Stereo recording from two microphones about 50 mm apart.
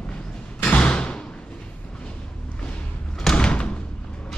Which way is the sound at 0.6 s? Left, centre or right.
Left.